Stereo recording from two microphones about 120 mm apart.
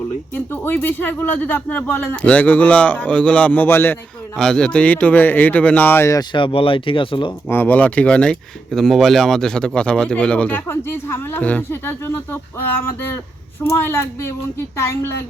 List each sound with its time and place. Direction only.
0.3 s speech: 15° left (ahead or behind)
4.4 s speech: 5° left (ahead or behind)
6.1 s speech: 45° left (ahead or behind)
7.4 s speech: 15° left (ahead or behind)